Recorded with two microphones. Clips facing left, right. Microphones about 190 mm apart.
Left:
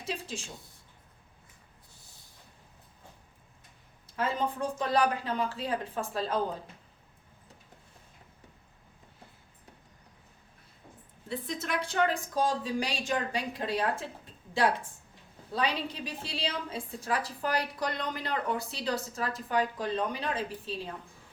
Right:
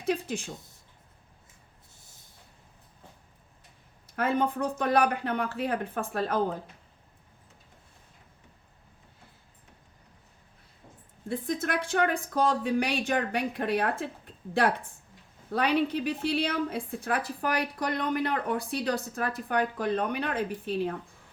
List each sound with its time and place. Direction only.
0.0 s a woman's voice: 60° right (ahead or behind)
4.1 s a woman's voice: 60° right (ahead or behind)
11.3 s a woman's voice: 50° right (ahead or behind)